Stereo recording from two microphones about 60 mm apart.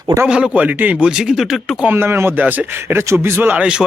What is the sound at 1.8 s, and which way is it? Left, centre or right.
Speech, right.